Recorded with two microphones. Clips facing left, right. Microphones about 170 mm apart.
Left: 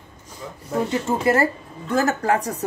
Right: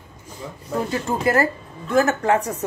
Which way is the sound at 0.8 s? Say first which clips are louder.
Left 1 dB; 25° left (ahead or behind).